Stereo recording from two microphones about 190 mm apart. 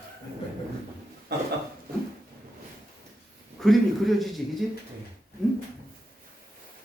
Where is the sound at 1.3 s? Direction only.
60° right (ahead or behind).